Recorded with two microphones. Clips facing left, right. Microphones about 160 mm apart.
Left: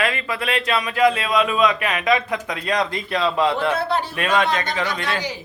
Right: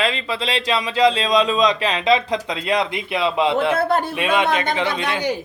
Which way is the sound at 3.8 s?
50° right (ahead or behind).